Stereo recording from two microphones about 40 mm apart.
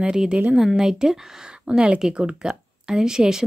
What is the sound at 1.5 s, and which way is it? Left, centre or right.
Speech, right.